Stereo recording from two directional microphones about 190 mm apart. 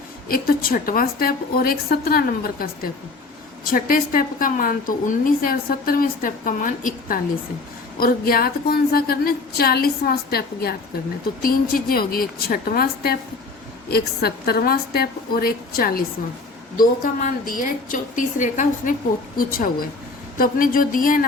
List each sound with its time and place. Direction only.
0.3 s a woman's voice: 50° left (ahead or behind)